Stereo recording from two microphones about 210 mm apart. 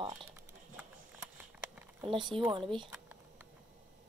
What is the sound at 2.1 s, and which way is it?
Speech, 25° right (ahead or behind).